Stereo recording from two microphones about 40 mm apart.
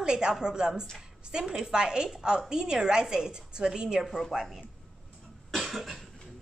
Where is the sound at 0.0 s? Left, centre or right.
Right.